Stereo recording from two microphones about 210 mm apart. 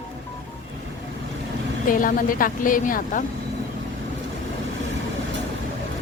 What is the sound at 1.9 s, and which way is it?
Speech, 40° left (ahead or behind).